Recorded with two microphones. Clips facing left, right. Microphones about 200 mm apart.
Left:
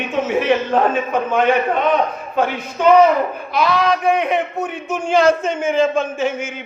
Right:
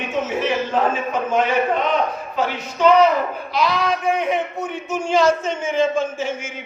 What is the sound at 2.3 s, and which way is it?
A woman's voice, 55° left (ahead or behind).